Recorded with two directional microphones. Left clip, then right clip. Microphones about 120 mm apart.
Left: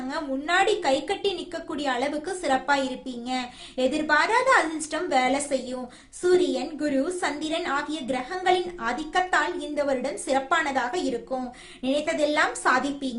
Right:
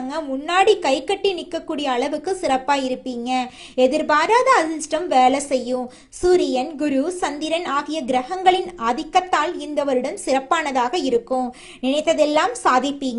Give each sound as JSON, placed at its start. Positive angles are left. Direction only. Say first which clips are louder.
{"t": 0.1, "sound": "a woman's voice", "louder": "right 3 dB", "side_deg": -40}